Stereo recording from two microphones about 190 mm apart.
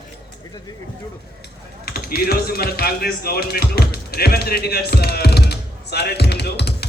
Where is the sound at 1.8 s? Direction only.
50° left (ahead or behind).